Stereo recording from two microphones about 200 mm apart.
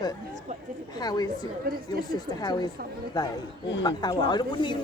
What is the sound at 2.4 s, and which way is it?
Speech, 20° left (ahead or behind).